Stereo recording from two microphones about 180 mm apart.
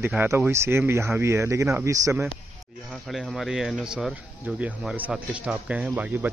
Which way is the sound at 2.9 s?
Centre (ahead or behind).